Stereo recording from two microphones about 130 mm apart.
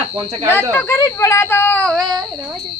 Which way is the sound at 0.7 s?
20° left (ahead or behind).